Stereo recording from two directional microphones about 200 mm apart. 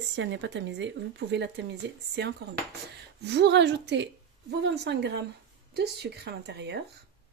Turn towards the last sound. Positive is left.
turn(degrees=-60)  # may be behind; listen again after turning